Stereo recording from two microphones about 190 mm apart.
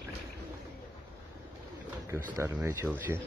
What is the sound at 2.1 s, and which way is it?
Speech, 15° right (ahead or behind).